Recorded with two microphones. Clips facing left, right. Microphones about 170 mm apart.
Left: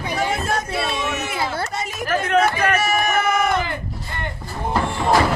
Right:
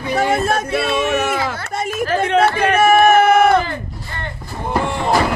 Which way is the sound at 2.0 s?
30° right (ahead or behind).